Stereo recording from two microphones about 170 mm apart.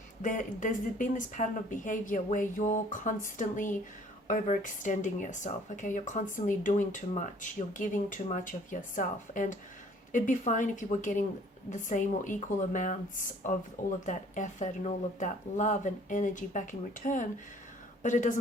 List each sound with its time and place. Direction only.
0.2 s speech: 50° left (ahead or behind)